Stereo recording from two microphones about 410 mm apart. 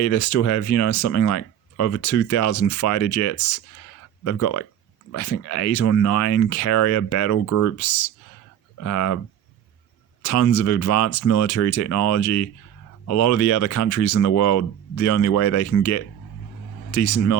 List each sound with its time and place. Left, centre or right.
0.0 s speech: left
10.2 s speech: left